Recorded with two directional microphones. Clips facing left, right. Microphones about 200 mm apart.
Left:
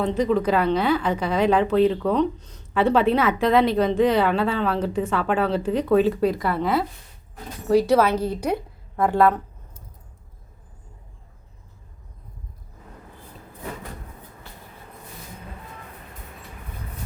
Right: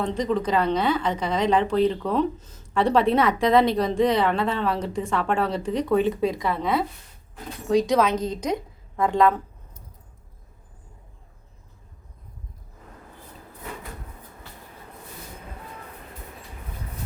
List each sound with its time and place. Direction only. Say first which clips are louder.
0.0 s a woman's voice: left 3 dB; 5° left (ahead or behind)